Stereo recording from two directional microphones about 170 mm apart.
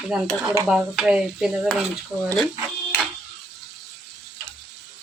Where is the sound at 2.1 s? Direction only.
20° right (ahead or behind).